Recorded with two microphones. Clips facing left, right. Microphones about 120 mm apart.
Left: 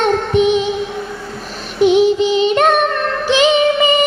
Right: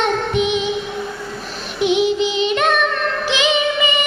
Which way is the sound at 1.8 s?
40° left (ahead or behind).